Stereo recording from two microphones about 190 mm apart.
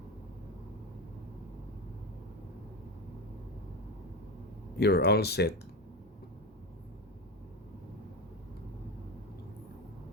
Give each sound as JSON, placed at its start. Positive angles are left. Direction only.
{"t": 4.8, "sound": "speech", "side_deg": 60}